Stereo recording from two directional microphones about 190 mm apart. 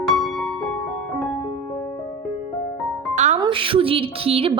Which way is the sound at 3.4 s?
25° right (ahead or behind).